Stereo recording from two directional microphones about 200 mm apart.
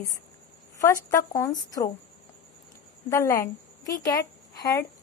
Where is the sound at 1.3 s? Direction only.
15° left (ahead or behind).